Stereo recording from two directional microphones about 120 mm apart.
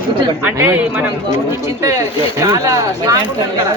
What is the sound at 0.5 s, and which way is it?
Speech, 15° right (ahead or behind).